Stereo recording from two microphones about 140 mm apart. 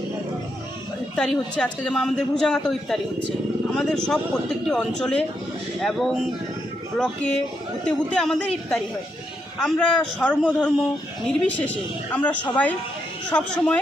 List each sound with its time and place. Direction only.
1.1 s a man's voice: 5° left (ahead or behind)